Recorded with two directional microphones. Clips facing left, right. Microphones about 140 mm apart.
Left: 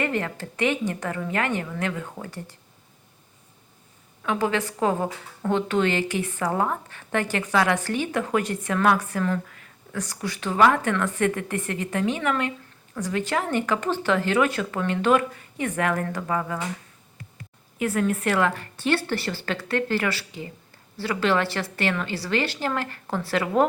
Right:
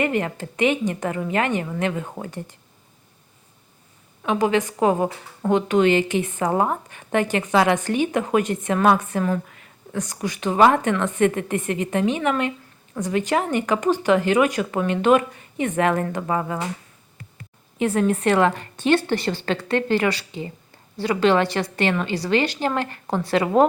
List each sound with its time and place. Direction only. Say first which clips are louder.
0.0 s a woman's voice: right 4 dB; 20° right (ahead or behind)
4.2 s a woman's voice: right 4 dB; 20° right (ahead or behind)
17.7 s a woman's voice: right 4 dB; 25° right (ahead or behind)